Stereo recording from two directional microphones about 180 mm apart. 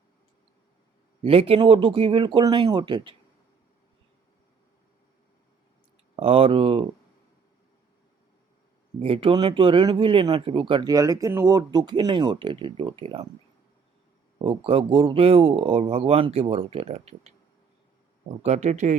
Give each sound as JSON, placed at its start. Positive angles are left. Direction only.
{"t": 1.2, "sound": "speech", "side_deg": -30}
{"t": 6.1, "sound": "speech", "side_deg": -30}
{"t": 9.0, "sound": "speech", "side_deg": -30}
{"t": 14.4, "sound": "speech", "side_deg": -30}
{"t": 18.4, "sound": "speech", "side_deg": -40}